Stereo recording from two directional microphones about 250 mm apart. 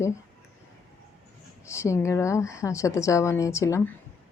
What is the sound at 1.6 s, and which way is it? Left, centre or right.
A woman's voice, centre.